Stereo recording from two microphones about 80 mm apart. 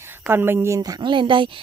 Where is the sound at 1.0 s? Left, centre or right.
Right.